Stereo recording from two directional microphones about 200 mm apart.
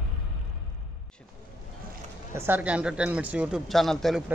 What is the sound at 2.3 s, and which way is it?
Speech, 10° right (ahead or behind).